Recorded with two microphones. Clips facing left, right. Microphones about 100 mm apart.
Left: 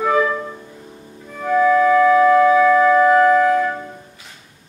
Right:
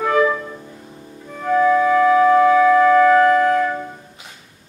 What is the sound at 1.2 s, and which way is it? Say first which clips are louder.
Music: even; 5° right (ahead or behind).